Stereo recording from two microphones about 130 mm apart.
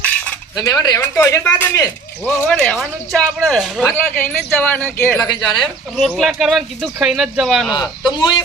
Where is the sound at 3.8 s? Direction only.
15° left (ahead or behind).